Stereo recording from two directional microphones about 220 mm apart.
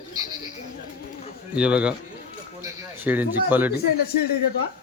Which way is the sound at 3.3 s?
10° right (ahead or behind).